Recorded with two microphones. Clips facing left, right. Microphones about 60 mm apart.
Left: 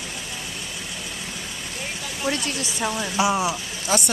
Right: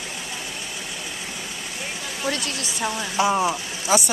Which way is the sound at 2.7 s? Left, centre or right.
Centre.